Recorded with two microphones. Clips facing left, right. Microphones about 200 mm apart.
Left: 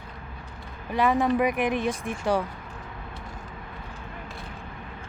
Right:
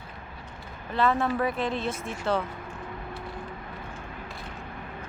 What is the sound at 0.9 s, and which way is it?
Speech, 15° left (ahead or behind).